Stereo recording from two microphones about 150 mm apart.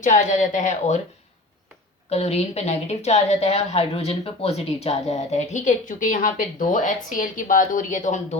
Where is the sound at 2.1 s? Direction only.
45° left (ahead or behind).